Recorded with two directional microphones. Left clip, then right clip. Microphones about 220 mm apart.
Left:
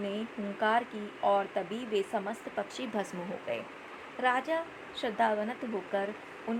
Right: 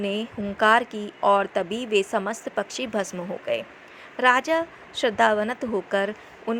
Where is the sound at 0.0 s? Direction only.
25° right (ahead or behind).